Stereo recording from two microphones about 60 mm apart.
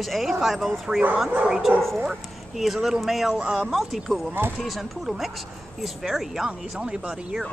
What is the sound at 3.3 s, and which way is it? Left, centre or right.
Speech, centre.